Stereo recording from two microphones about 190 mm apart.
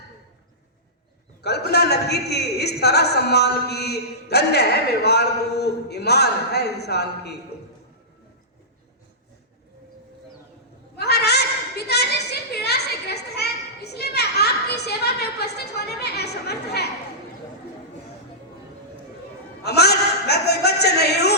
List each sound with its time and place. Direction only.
1.4 s a man's voice: 60° left (ahead or behind)
10.9 s a sound: 60° left (ahead or behind)
19.6 s a man's voice: 60° left (ahead or behind)